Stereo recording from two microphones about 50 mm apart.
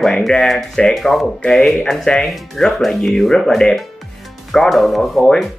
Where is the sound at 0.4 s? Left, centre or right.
Centre.